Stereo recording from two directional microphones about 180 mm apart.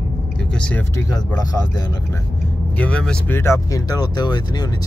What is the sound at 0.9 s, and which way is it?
Speech, 20° left (ahead or behind).